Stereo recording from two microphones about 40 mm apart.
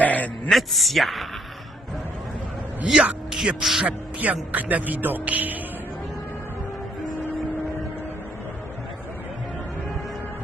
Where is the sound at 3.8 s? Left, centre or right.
Right.